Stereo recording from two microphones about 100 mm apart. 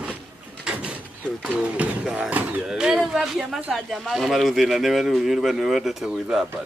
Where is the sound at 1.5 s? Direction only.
10° right (ahead or behind).